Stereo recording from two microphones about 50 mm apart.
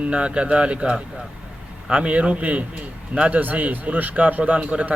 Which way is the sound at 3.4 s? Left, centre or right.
Right.